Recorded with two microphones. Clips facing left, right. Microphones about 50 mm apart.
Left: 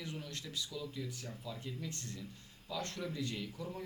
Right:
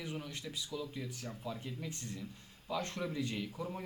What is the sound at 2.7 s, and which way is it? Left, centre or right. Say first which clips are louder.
A man's voice: right 3 dB; right.